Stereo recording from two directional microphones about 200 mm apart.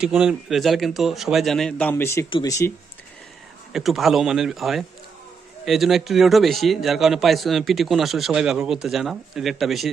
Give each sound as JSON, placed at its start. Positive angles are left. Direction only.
{"t": 0.0, "sound": "a man's voice", "side_deg": -5}
{"t": 3.7, "sound": "a man's voice", "side_deg": 0}